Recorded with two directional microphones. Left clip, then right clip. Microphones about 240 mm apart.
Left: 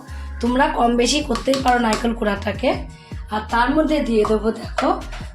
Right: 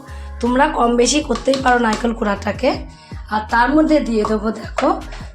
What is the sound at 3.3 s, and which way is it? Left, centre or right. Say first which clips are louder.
Music: right 4 dB; right.